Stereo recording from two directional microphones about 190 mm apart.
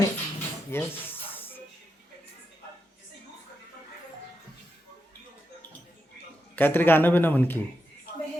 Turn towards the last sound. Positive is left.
turn(degrees=10)  # may be behind; listen again after turning